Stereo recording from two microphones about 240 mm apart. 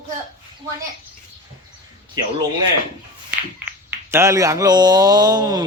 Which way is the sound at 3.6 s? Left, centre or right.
Centre.